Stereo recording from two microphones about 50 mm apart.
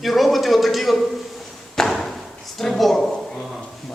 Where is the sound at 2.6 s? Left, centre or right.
Centre.